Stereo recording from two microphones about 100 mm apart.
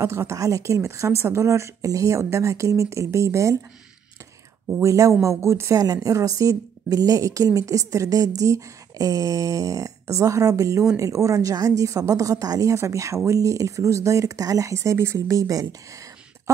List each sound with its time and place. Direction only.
0.0 s a woman's voice: 30° right (ahead or behind)
4.8 s a woman's voice: 35° right (ahead or behind)
16.5 s beatboxing: 30° right (ahead or behind)